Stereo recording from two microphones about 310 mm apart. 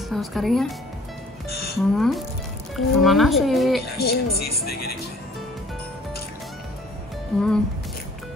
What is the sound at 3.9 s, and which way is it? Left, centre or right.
Speech, left.